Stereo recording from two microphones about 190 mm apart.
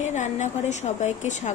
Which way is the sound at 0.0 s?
40° left (ahead or behind).